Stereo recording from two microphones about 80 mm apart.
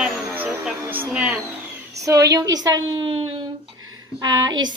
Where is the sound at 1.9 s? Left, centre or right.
Right.